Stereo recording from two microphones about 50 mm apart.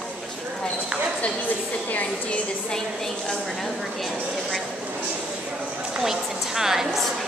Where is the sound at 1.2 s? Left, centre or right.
Left.